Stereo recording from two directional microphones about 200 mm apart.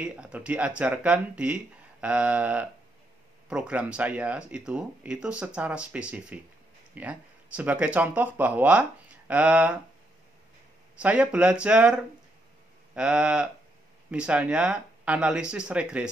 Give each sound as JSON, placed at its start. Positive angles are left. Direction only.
{"t": 0.0, "sound": "speech", "side_deg": -5}
{"t": 11.0, "sound": "speech", "side_deg": -5}